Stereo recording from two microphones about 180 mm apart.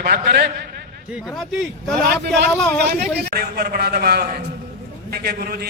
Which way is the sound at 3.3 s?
60° right (ahead or behind).